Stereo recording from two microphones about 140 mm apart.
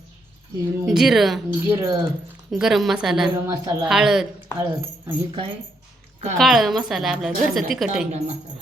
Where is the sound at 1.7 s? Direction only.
25° right (ahead or behind).